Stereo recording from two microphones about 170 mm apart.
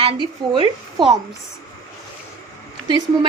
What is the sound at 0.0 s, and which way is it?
A woman's voice, 30° right (ahead or behind).